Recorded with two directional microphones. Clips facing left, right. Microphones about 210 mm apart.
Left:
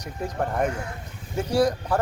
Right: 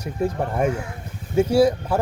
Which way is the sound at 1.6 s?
10° right (ahead or behind).